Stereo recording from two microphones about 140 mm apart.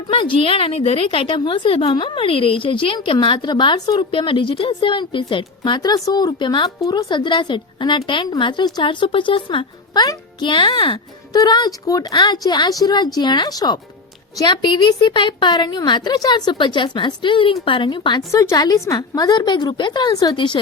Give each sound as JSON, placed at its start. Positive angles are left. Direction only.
{"t": 0.1, "sound": "a woman's voice", "side_deg": 40}
{"t": 18.3, "sound": "a woman's voice", "side_deg": 25}